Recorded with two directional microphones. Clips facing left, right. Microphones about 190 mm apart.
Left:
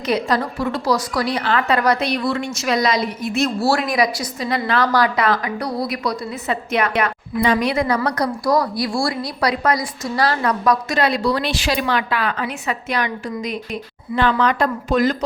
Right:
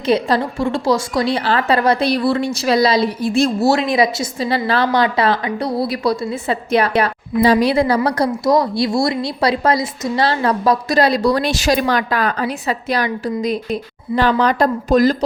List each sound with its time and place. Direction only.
0.0 s a woman's voice: 30° right (ahead or behind)